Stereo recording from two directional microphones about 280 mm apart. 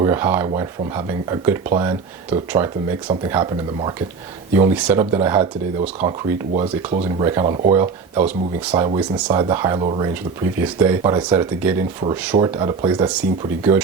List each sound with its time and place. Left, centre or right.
0.0 s speech: centre